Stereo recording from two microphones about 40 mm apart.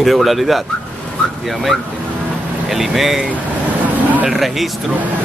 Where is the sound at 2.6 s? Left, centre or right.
Centre.